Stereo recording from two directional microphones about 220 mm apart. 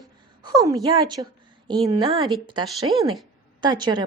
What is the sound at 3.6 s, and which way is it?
Speech, 20° right (ahead or behind).